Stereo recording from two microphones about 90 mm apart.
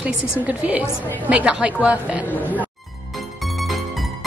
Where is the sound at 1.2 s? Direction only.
10° right (ahead or behind).